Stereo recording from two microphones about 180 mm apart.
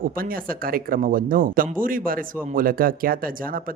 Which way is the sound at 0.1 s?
50° right (ahead or behind).